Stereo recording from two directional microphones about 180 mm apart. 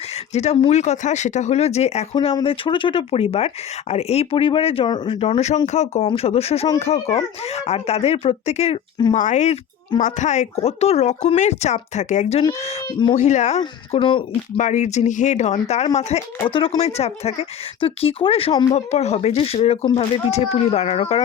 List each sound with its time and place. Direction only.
0.3 s speech: 35° left (ahead or behind)
2.1 s speech: 25° left (ahead or behind)
12.5 s speech: 25° left (ahead or behind)
13.1 s speech: 40° left (ahead or behind)
14.6 s speech: 40° left (ahead or behind)